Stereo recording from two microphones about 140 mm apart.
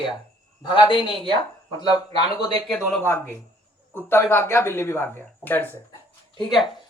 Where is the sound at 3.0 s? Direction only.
15° left (ahead or behind).